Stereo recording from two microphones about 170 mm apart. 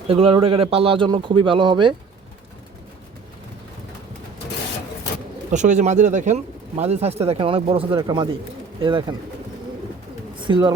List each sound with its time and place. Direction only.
0.1 s speech: 35° right (ahead or behind)
5.5 s speech: 45° right (ahead or behind); by 9.1 s 30° right (ahead or behind)
10.4 s speech: 30° right (ahead or behind)